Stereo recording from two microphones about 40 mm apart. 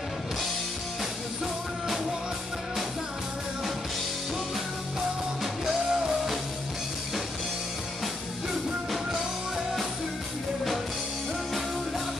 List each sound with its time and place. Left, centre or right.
5.4 s music: centre